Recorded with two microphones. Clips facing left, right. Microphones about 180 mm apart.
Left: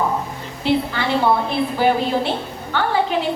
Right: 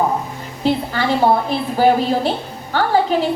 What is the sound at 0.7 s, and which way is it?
A woman's voice, 40° right (ahead or behind).